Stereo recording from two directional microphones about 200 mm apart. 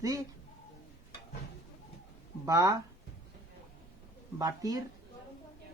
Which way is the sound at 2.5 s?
15° right (ahead or behind).